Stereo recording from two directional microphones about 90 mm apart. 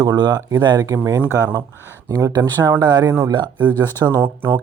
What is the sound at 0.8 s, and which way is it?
Speech, 35° right (ahead or behind).